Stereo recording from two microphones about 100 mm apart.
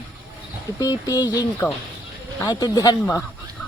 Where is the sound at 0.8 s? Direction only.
40° left (ahead or behind).